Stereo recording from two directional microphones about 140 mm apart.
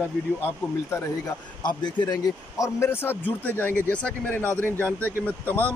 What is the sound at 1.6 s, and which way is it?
Speech, 30° left (ahead or behind).